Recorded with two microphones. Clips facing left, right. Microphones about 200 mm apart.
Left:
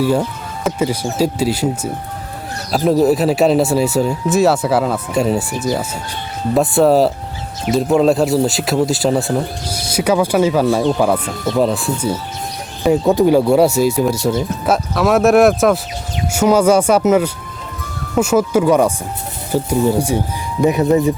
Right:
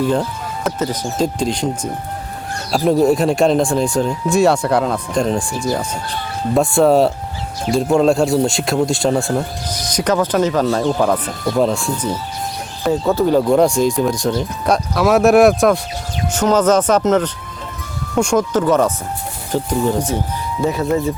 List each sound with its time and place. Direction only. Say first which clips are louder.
0.0 s speech: left 1 dB; 10° left (ahead or behind)